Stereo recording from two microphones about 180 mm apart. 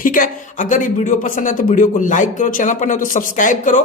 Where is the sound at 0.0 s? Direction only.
50° left (ahead or behind).